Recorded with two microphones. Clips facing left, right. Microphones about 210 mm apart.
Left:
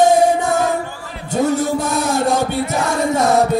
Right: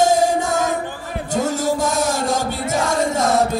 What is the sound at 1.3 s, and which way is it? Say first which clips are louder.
Music: left 4 dB; 60° left (ahead or behind).